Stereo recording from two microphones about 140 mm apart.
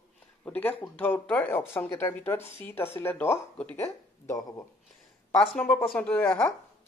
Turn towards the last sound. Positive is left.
turn(degrees=10)  # may be behind; listen again after turning